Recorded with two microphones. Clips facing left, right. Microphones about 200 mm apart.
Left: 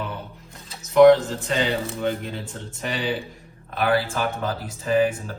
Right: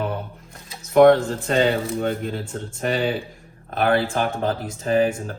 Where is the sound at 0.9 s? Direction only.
50° right (ahead or behind).